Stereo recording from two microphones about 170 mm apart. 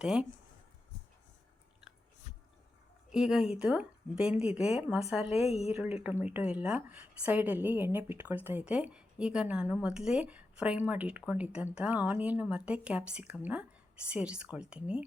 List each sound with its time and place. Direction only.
0.0 s a woman's voice: 5° right (ahead or behind)
3.1 s a woman's voice: 5° right (ahead or behind)
5.5 s a woman's voice: 35° left (ahead or behind)
5.7 s a woman's voice: 5° right (ahead or behind)